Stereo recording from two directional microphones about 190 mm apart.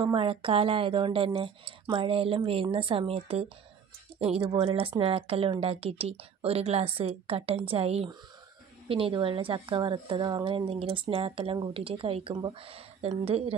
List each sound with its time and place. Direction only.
0.0 s a woman's voice: 25° right (ahead or behind)
4.5 s a woman's voice: 30° right (ahead or behind)